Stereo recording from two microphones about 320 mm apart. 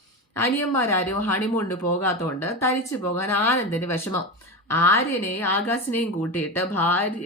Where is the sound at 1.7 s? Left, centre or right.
Left.